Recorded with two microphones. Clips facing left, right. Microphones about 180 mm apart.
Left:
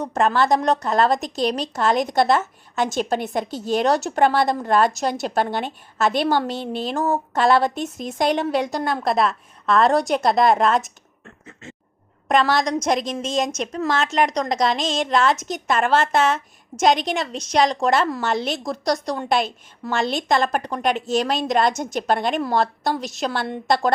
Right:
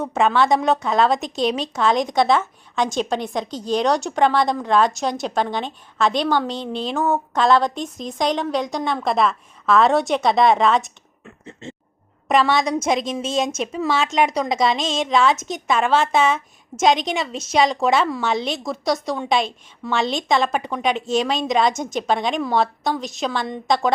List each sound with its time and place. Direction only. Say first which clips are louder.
0.0 s a woman's voice: right 1 dB; centre (ahead or behind)
11.6 s speech: right 5 dB; 30° right (ahead or behind)
12.3 s a woman's voice: right 1 dB; centre (ahead or behind)